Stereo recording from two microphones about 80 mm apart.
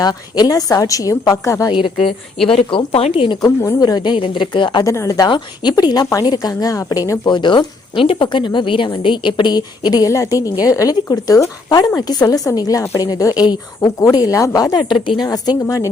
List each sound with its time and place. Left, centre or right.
0.0 s a woman's voice: left
2.0 s speech: centre
2.6 s speech: left
3.8 s speech: left
4.8 s a woman's voice: left
7.3 s a woman's voice: left
13.4 s a woman's voice: left
14.0 s a woman's voice: left
15.6 s a woman's voice: left